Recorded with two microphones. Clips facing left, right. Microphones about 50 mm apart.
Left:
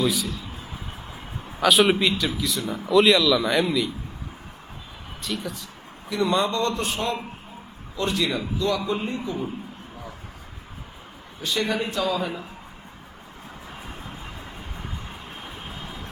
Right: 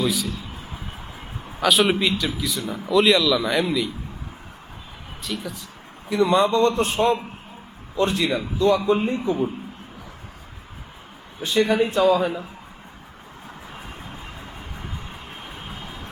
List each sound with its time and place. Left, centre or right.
0.0 s speech: centre
1.5 s speech: centre
5.2 s speech: centre
6.2 s a man's voice: centre
6.6 s a man's voice: right
7.9 s a man's voice: right
11.4 s a man's voice: right